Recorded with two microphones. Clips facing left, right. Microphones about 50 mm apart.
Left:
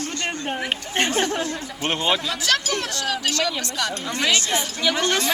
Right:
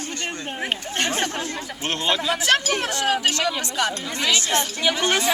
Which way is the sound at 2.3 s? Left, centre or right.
Right.